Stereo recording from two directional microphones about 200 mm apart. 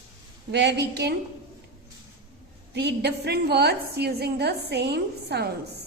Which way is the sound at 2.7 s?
55° right (ahead or behind).